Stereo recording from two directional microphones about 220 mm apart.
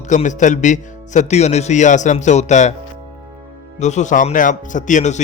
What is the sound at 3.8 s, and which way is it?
Speech, 30° left (ahead or behind).